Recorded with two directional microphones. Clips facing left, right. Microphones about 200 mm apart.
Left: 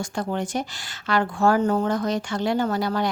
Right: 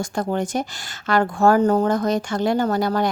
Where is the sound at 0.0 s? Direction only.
45° right (ahead or behind).